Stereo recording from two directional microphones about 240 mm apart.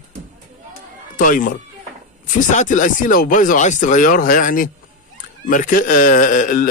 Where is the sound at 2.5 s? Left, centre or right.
Left.